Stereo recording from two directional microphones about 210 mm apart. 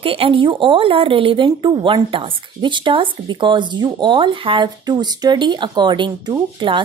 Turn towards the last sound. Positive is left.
turn(degrees=-20)  # may be behind; listen again after turning